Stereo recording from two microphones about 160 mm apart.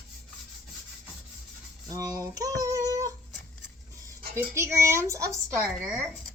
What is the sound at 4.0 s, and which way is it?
Speech, 20° right (ahead or behind).